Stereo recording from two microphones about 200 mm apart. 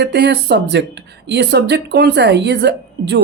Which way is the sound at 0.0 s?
55° right (ahead or behind).